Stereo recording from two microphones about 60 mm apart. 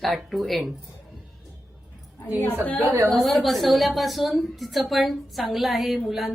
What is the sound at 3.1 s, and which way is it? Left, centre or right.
A woman's voice, centre.